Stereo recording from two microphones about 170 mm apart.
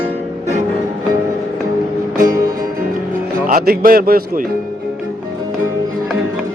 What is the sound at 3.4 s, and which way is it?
Speech, 55° right (ahead or behind).